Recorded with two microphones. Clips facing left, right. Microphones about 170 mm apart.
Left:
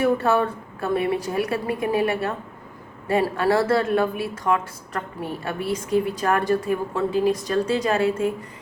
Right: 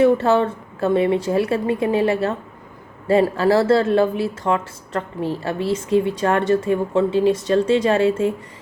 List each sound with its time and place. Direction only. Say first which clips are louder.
0.0 s speech: right 5 dB; 25° right (ahead or behind)